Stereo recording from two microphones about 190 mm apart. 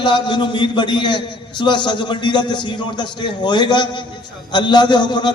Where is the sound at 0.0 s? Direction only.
25° left (ahead or behind).